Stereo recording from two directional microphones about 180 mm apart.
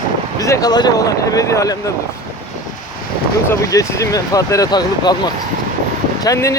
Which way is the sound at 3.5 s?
20° left (ahead or behind).